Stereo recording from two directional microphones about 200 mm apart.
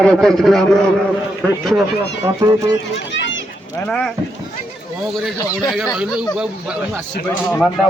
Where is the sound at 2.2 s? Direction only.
20° right (ahead or behind).